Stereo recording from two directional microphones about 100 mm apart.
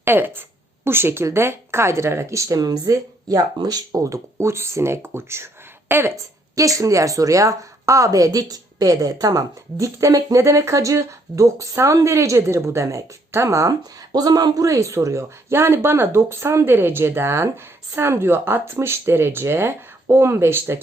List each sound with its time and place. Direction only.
0.0 s a woman's voice: 20° right (ahead or behind)